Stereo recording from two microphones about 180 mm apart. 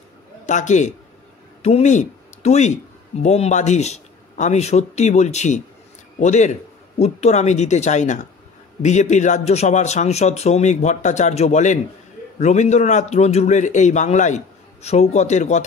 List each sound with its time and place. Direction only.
0.5 s speech: 40° left (ahead or behind)